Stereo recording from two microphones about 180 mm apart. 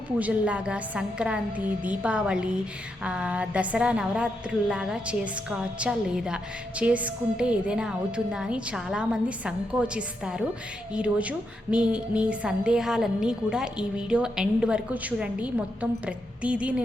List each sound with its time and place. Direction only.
0.2 s a woman's voice: 5° right (ahead or behind)